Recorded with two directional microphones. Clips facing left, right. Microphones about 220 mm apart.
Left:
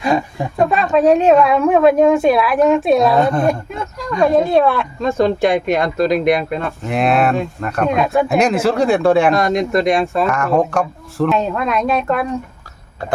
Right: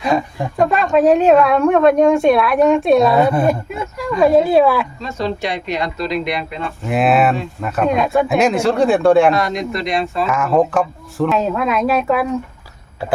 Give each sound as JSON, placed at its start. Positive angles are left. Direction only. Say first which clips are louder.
{"t": 0.0, "sound": "speech", "louder": "left 1 dB", "side_deg": 0}
{"t": 4.9, "sound": "speech", "louder": "left 7 dB", "side_deg": 50}
{"t": 6.8, "sound": "speech", "louder": "right 1 dB", "side_deg": -5}
{"t": 9.3, "sound": "speech", "louder": "left 4 dB", "side_deg": 45}
{"t": 10.2, "sound": "speech", "louder": "even", "side_deg": 0}
{"t": 13.0, "sound": "cough", "louder": "right 1 dB", "side_deg": -5}